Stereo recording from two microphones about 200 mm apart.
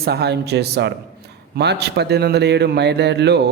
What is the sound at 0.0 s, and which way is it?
A man's voice, 50° right (ahead or behind).